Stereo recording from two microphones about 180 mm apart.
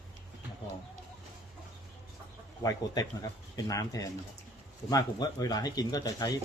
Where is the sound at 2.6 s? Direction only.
20° left (ahead or behind).